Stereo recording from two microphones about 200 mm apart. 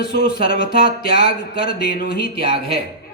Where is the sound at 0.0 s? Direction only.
50° left (ahead or behind).